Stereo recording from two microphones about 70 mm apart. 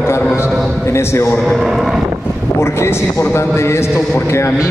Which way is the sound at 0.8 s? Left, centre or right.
Left.